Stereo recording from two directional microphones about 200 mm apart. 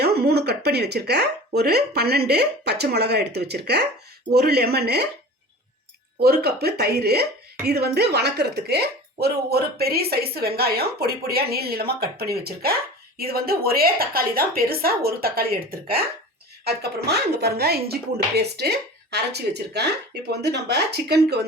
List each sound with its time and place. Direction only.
0.0 s speech: 55° right (ahead or behind)
6.1 s speech: 50° right (ahead or behind)